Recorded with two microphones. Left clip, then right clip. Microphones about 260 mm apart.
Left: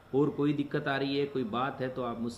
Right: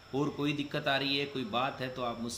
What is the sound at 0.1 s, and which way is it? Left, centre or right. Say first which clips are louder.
Speech: left 5 dB; centre.